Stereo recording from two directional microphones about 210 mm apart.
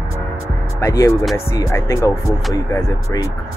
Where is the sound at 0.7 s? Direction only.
15° left (ahead or behind).